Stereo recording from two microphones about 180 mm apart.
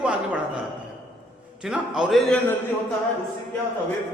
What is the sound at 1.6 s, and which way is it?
Speech, 5° right (ahead or behind).